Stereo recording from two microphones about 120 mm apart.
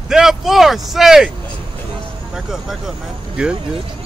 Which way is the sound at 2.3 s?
5° right (ahead or behind).